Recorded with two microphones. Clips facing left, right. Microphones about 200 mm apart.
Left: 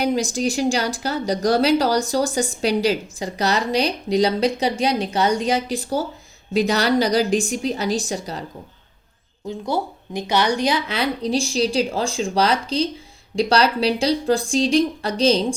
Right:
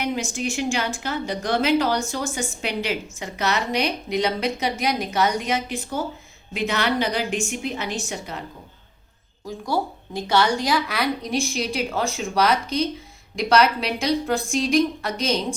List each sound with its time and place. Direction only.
0.0 s a woman's voice: 35° left (ahead or behind)
9.5 s a woman's voice: 20° left (ahead or behind)